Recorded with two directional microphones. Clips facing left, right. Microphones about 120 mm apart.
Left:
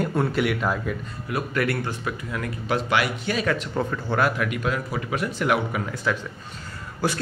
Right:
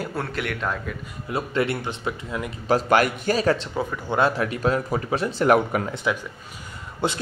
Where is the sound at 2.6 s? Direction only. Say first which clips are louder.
Right 5 dB; 40° right (ahead or behind).